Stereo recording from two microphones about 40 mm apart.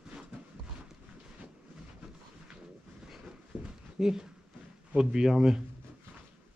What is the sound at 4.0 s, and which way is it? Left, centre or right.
Speech, centre.